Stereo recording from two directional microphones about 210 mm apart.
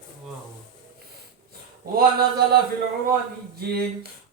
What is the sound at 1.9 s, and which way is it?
Speech, 45° right (ahead or behind).